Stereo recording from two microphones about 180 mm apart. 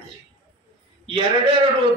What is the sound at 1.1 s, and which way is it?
Speech, 30° right (ahead or behind).